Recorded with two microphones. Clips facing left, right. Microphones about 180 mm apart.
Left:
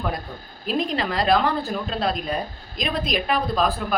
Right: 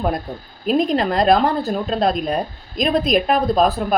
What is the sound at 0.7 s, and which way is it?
A woman's voice, 45° right (ahead or behind).